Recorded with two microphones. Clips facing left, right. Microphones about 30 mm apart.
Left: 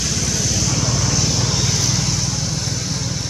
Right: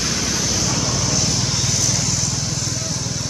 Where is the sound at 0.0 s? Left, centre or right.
Centre.